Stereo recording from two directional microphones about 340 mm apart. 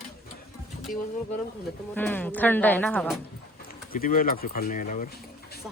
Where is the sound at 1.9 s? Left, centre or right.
Centre.